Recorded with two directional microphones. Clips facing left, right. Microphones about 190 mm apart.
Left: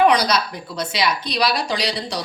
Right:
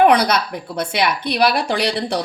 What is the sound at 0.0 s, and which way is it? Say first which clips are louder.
A woman's voice: right 3 dB; 55° right (ahead or behind).